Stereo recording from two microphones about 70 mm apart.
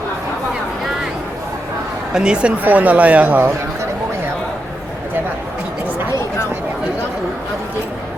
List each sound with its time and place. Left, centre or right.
2.1 s a woman's voice: centre
2.6 s speech: right